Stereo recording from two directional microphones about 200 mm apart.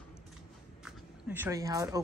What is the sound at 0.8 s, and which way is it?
Speech, 10° right (ahead or behind).